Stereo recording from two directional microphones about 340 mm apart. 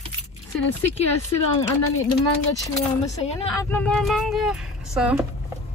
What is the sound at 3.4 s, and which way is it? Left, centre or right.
A woman's voice, centre.